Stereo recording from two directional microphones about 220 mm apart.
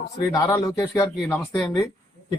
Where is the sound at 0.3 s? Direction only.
15° left (ahead or behind).